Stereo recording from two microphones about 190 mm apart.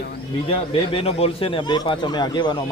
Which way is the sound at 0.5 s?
30° left (ahead or behind).